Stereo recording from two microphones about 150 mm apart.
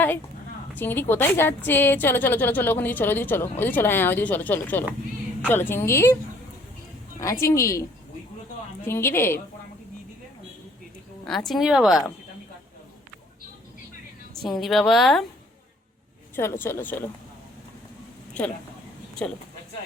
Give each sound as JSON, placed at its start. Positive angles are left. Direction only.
{"t": 0.8, "sound": "a woman's voice", "side_deg": 15}
{"t": 7.2, "sound": "a woman's voice", "side_deg": 20}
{"t": 11.3, "sound": "a woman's voice", "side_deg": 0}
{"t": 14.4, "sound": "a woman's voice", "side_deg": 0}
{"t": 16.3, "sound": "a woman's voice", "side_deg": 15}
{"t": 18.4, "sound": "a woman's voice", "side_deg": 10}